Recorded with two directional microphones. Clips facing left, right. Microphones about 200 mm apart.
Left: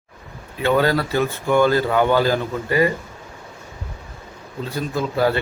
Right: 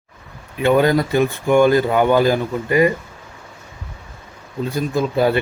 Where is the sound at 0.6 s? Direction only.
15° right (ahead or behind).